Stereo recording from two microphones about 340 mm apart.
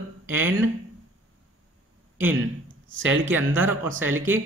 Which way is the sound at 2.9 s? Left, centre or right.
Right.